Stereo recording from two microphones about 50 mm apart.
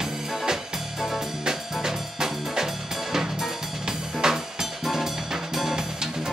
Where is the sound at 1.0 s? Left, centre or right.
Centre.